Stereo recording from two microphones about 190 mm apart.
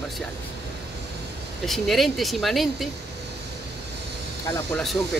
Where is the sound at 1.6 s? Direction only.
Centre (ahead or behind).